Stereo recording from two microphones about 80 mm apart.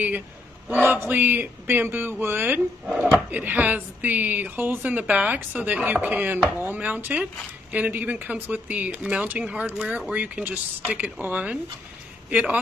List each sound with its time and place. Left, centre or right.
0.8 s a woman's voice: right